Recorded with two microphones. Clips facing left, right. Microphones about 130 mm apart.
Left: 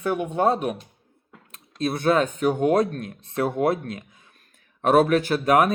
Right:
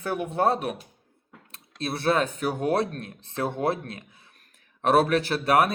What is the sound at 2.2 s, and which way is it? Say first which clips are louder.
Speech: left 5 dB; 35° right (ahead or behind).